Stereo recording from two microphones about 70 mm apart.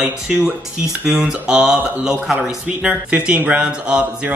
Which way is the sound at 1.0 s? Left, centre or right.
Centre.